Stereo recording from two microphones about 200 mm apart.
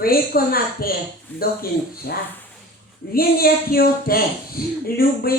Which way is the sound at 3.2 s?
50° left (ahead or behind).